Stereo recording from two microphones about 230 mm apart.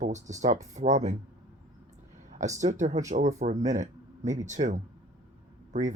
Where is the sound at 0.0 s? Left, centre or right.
Right.